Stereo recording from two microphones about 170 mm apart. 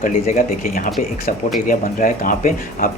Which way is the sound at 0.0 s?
55° left (ahead or behind).